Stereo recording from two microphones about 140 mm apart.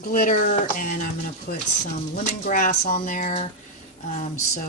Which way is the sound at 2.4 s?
70° left (ahead or behind).